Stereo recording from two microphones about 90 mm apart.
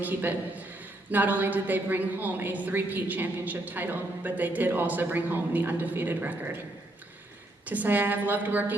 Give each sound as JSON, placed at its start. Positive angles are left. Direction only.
{"t": 0.0, "sound": "a woman's voice", "side_deg": -20}
{"t": 7.7, "sound": "a woman's voice", "side_deg": -20}